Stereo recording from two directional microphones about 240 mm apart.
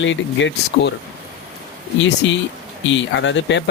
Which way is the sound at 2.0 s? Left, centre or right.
Left.